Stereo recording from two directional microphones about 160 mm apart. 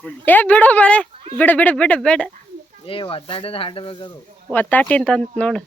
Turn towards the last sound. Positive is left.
turn(degrees=5)  # may be behind; listen again after turning